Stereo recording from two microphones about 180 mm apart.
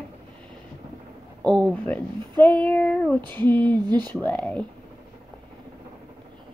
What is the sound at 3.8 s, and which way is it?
Speech, 25° right (ahead or behind).